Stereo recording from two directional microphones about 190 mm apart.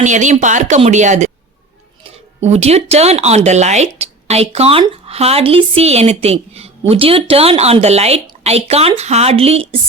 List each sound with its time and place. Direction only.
0.0 s speech: 40° right (ahead or behind)